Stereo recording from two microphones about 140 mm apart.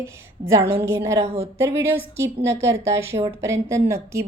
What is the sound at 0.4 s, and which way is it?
A woman's voice, 20° right (ahead or behind).